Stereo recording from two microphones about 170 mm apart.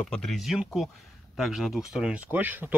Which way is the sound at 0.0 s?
5° left (ahead or behind).